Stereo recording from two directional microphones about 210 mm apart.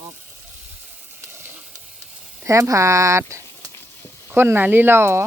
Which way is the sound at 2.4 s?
15° right (ahead or behind).